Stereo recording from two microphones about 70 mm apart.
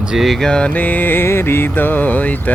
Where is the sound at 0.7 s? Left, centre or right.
Left.